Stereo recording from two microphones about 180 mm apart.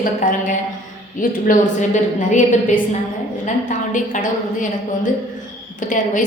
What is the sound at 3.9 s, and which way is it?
A woman's voice, 45° left (ahead or behind).